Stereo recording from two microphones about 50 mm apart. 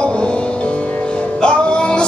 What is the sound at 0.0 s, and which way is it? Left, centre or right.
Music, left.